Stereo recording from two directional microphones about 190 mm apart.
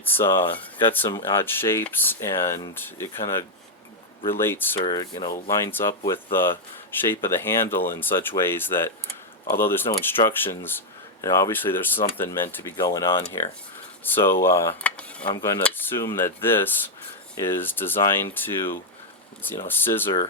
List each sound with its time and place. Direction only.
0.0 s speech: 10° left (ahead or behind)
4.8 s speech: 25° left (ahead or behind)
19.6 s speech: 10° left (ahead or behind)